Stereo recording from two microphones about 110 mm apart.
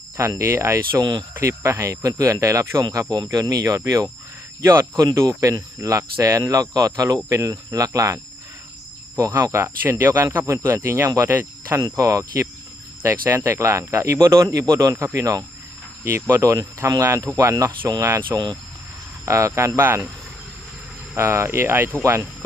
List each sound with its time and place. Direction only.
0.2 s speech: 25° right (ahead or behind)
21.2 s speech: 25° right (ahead or behind)